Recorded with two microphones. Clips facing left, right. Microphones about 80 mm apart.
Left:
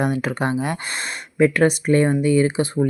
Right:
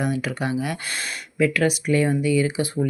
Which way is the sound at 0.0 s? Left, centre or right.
Left.